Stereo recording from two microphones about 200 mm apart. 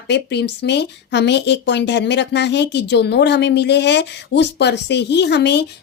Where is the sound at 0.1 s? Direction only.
55° left (ahead or behind).